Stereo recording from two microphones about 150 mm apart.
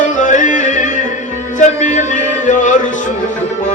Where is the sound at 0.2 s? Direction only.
55° left (ahead or behind).